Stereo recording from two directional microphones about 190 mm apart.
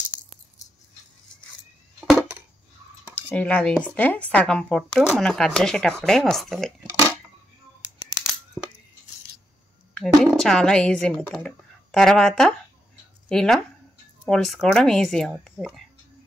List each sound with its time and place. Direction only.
0.1 s music: 40° left (ahead or behind)
2.0 s a sound: 5° right (ahead or behind)
3.3 s a woman's voice: 5° left (ahead or behind)
9.9 s a woman's voice: 5° left (ahead or behind)